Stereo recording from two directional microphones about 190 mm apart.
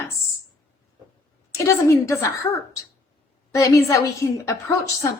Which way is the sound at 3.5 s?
15° left (ahead or behind).